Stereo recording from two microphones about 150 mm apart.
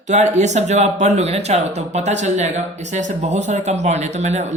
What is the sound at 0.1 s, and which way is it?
Speech, 50° right (ahead or behind).